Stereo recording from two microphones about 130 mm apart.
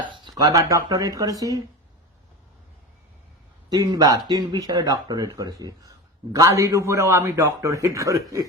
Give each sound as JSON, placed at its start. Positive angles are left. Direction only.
{"t": 0.1, "sound": "speech", "side_deg": -30}
{"t": 3.7, "sound": "a man's voice", "side_deg": -30}